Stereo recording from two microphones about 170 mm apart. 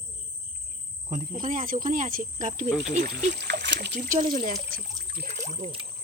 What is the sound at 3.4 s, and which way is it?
Speech, 85° right.